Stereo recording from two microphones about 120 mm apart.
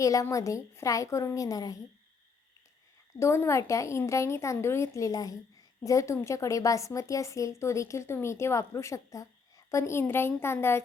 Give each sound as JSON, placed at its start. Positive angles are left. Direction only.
{"t": 0.0, "sound": "speech", "side_deg": 30}
{"t": 3.2, "sound": "speech", "side_deg": 25}